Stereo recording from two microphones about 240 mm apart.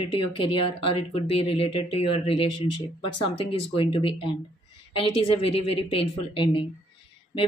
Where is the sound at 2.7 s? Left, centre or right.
Left.